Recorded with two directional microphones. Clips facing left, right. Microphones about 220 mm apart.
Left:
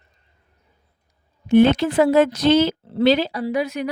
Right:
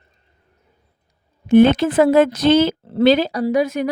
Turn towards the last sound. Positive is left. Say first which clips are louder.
# right 5 dB
turn(degrees=-45)  # may be behind; listen again after turning